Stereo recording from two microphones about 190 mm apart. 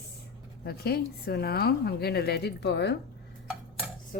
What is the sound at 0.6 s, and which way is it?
Speech, 55° left (ahead or behind).